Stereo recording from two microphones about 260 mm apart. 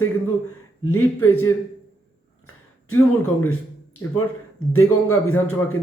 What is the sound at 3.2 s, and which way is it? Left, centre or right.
A man's voice, left.